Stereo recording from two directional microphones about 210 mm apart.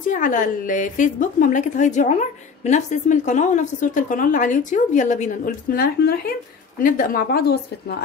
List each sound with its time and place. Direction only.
0.0 s a woman's voice: 40° left (ahead or behind)